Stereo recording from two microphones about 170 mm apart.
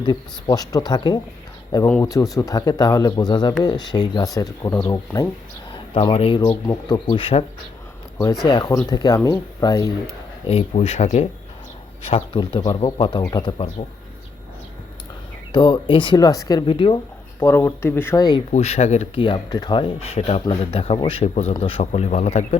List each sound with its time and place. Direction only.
0.0 s speech: 25° left (ahead or behind)
5.7 s speech: 30° left (ahead or behind)
8.4 s speech: 25° left (ahead or behind)
10.4 s speech: 35° left (ahead or behind)
15.5 s speech: 30° left (ahead or behind)
17.4 s speech: 15° left (ahead or behind)
18.5 s speech: 40° left (ahead or behind)
19.2 s speech: 25° left (ahead or behind); by 22.4 s 40° left (ahead or behind)